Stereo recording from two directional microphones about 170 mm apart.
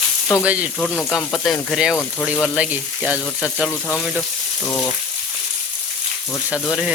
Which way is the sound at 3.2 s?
5° left (ahead or behind).